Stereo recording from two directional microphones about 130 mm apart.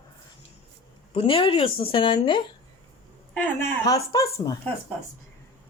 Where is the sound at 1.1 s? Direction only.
45° left (ahead or behind).